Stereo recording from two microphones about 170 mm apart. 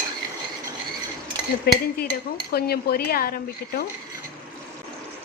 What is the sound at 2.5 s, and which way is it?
Speech, 65° left (ahead or behind).